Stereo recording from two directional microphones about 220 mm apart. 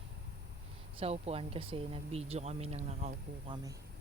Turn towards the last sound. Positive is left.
turn(degrees=-30)  # may be behind; listen again after turning